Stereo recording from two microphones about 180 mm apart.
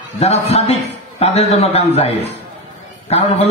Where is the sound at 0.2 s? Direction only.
35° left (ahead or behind).